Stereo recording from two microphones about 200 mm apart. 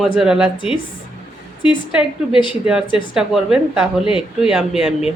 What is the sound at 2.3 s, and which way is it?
Speech, 25° left (ahead or behind).